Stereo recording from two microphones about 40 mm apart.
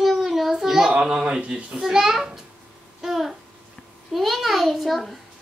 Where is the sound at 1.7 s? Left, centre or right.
Centre.